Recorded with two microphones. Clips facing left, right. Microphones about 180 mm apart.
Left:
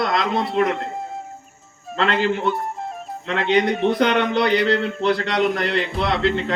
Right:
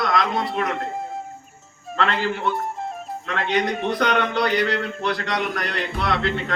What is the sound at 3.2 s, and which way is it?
A man's voice, 25° left (ahead or behind).